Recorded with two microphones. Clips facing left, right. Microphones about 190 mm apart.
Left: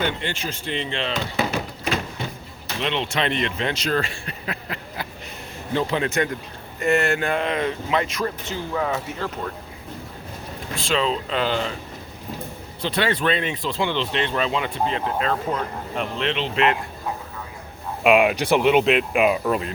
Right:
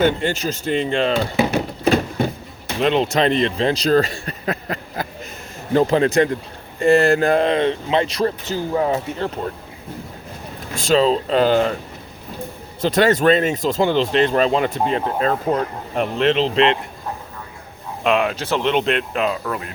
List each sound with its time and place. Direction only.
0.0 s speech: 45° right (ahead or behind)
1.8 s a sound: 45° right (ahead or behind)
2.8 s speech: 40° right (ahead or behind)
10.8 s speech: 40° right (ahead or behind)
12.8 s speech: 45° right (ahead or behind)
18.0 s speech: 10° left (ahead or behind)